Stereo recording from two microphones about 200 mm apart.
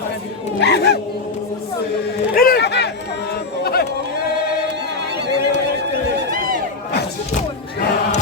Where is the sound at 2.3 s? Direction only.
45° left (ahead or behind).